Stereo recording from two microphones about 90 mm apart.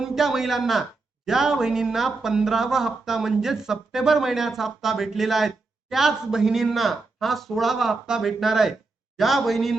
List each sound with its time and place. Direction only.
0.0 s a man's voice: 5° right (ahead or behind)